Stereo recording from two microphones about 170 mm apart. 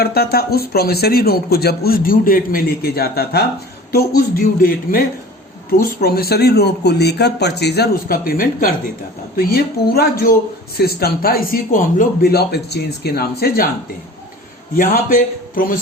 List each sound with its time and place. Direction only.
0.0 s speech: 65° left (ahead or behind)
14.8 s speech: 55° left (ahead or behind)